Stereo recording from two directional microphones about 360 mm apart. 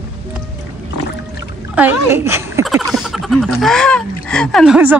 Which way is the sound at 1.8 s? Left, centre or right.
Centre.